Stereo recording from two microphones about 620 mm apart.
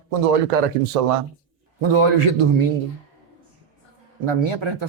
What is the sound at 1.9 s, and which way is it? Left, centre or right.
Speech, right.